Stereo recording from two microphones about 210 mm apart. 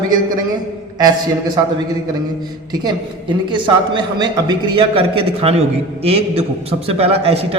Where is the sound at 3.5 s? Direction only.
20° right (ahead or behind).